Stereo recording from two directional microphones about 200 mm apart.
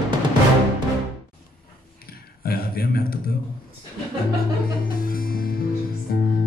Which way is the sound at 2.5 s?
50° left (ahead or behind).